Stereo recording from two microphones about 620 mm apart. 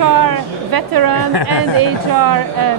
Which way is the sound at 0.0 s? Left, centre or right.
Right.